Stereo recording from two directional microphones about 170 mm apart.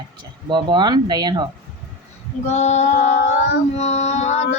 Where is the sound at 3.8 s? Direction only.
40° left (ahead or behind).